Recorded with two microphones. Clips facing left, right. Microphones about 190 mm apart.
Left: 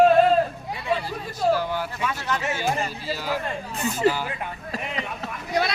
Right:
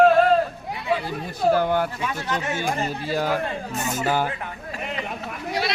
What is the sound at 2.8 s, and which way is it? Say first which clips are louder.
Speech: right 5 dB; 55° right (ahead or behind).